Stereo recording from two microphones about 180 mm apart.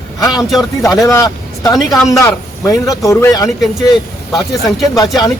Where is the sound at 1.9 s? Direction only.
Centre (ahead or behind).